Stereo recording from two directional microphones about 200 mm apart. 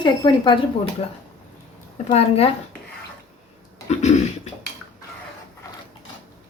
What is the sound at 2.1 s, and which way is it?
Speech, 30° left (ahead or behind).